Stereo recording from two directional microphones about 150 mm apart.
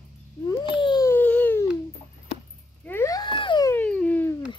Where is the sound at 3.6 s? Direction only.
10° left (ahead or behind).